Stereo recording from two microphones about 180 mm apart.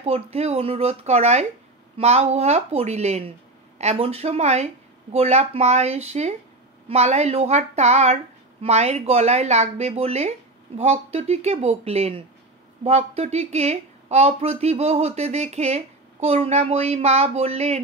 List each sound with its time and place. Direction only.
0.0 s speech: 35° right (ahead or behind)